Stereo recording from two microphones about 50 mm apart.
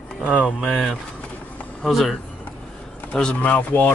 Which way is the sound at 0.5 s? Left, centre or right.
Centre.